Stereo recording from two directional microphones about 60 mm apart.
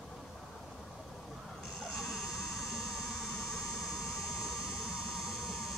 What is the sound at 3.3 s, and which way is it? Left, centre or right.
Vehicle, centre.